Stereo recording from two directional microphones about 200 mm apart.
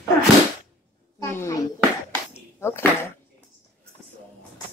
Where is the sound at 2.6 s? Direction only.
10° left (ahead or behind).